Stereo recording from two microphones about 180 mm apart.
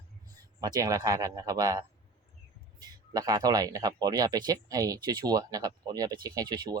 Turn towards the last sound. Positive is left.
turn(degrees=-20)  # may be behind; listen again after turning